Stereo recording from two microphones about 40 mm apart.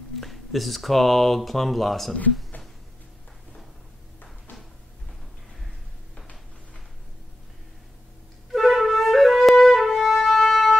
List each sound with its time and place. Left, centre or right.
0.2 s speech: centre
8.5 s flute: centre